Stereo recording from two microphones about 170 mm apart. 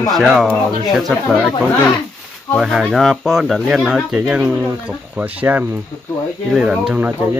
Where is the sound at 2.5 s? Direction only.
Centre (ahead or behind).